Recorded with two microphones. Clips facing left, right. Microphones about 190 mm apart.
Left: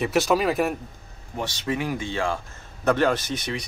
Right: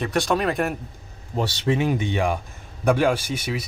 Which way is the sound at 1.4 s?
25° right (ahead or behind).